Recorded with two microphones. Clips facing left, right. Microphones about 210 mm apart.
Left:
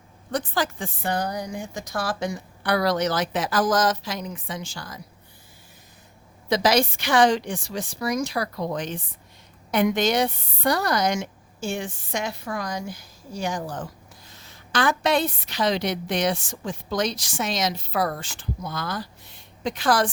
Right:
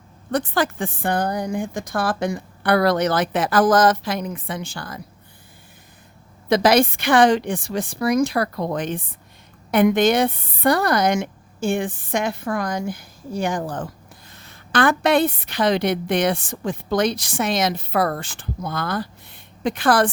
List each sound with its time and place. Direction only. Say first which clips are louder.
0.3 s a woman's voice: right 5 dB; 60° right (ahead or behind)
6.5 s a woman's voice: right 5 dB; 55° right (ahead or behind)